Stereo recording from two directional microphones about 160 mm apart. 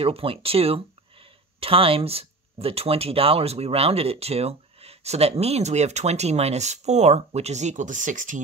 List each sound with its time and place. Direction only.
0.0 s speech: 35° right (ahead or behind); by 8.4 s 55° right (ahead or behind)